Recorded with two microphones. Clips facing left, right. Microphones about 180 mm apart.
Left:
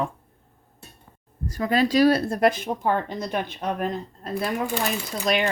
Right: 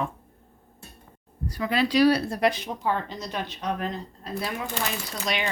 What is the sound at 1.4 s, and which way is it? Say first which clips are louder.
Speech: left 3 dB; 45° left (ahead or behind).